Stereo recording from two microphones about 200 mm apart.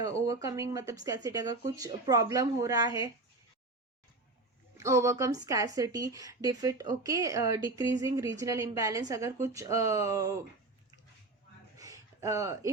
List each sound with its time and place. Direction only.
0.0 s a woman's voice: 15° right (ahead or behind)
4.8 s a woman's voice: 15° right (ahead or behind)
11.8 s a sound: 15° right (ahead or behind)